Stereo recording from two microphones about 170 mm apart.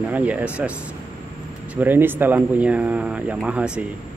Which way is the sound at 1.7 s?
10° right (ahead or behind).